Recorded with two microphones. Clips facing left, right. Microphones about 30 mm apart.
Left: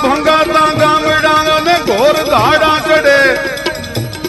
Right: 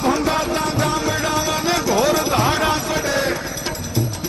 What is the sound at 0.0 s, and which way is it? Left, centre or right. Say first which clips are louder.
Music: left 9 dB; left.